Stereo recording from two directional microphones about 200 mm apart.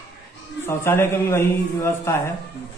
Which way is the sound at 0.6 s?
10° left (ahead or behind).